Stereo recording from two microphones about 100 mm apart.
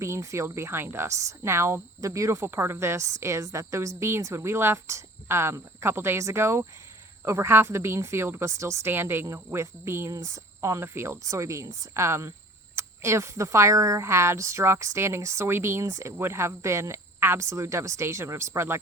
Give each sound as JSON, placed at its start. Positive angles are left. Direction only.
{"t": 0.0, "sound": "speech", "side_deg": -30}